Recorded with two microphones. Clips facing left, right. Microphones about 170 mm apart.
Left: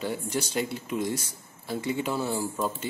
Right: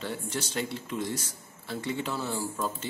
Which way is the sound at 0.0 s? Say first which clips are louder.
Left 4 dB; 10° left (ahead or behind).